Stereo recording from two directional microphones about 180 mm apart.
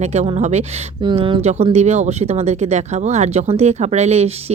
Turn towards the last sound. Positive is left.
turn(degrees=-35)  # may be behind; listen again after turning